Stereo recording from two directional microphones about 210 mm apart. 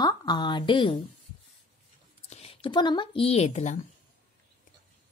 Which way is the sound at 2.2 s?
30° left (ahead or behind).